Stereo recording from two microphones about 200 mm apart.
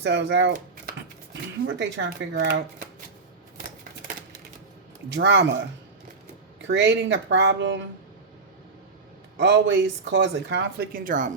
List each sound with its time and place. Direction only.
0.0 s speech: 60° right (ahead or behind)
5.0 s speech: 60° right (ahead or behind)
6.6 s speech: 60° right (ahead or behind)
9.4 s speech: 65° right (ahead or behind); by 11.3 s 40° right (ahead or behind)